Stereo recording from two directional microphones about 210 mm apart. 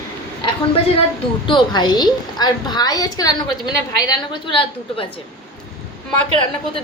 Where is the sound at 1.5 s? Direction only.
20° left (ahead or behind).